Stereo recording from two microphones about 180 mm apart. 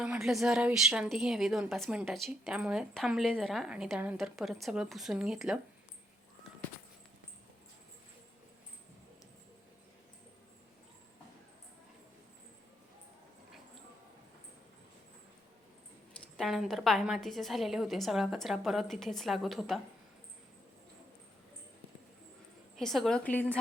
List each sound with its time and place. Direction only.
0.0 s a woman's voice: 5° right (ahead or behind)
16.4 s a woman's voice: centre (ahead or behind)
22.8 s a woman's voice: centre (ahead or behind)